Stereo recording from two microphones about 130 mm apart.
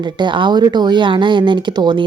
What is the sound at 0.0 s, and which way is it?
Speech, 35° right (ahead or behind).